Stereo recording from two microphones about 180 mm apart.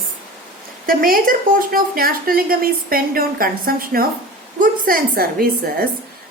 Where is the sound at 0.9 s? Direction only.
50° right (ahead or behind).